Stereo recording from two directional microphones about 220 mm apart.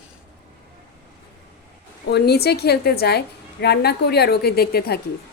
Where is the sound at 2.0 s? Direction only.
45° left (ahead or behind).